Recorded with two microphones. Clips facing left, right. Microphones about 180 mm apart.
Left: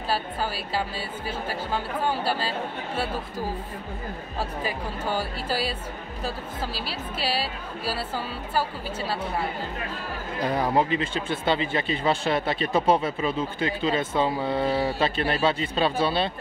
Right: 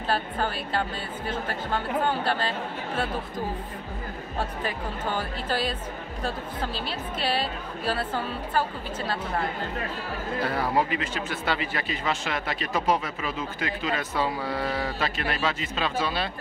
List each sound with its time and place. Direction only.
0.1 s speech: 5° left (ahead or behind)
4.4 s speech: 10° left (ahead or behind)
10.4 s speech: 20° left (ahead or behind)